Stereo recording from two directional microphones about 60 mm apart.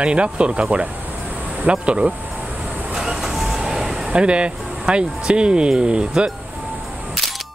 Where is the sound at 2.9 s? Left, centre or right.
Centre.